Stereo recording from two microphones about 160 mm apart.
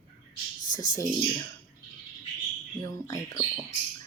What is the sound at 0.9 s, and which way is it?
Speech, 20° left (ahead or behind).